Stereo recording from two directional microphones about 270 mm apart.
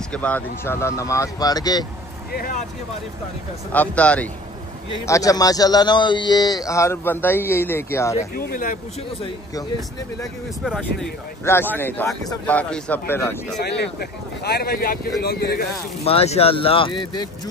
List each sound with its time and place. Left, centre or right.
0.1 s a man's voice: centre
2.3 s speech: left
3.7 s a man's voice: centre
8.2 s speech: left
10.6 s a man's voice: centre
13.6 s speech: left
16.0 s speech: left